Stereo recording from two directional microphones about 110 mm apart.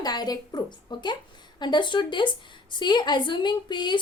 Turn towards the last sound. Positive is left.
turn(degrees=45)  # may be behind; listen again after turning